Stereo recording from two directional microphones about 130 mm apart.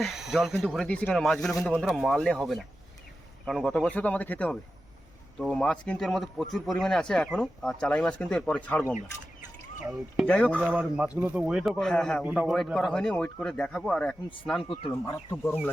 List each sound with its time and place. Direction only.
0.0 s speech: centre (ahead or behind)
10.2 s speech: 10° left (ahead or behind)
10.7 s speech: 10° right (ahead or behind); by 14.2 s 10° left (ahead or behind)
14.6 s speech: 45° left (ahead or behind)
15.0 s speech: 25° left (ahead or behind)